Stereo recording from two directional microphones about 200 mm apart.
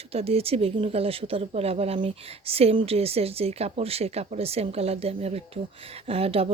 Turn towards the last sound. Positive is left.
turn(degrees=-30)  # may be behind; listen again after turning